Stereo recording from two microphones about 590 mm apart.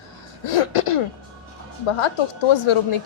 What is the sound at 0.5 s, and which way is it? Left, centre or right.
Throat clearing, left.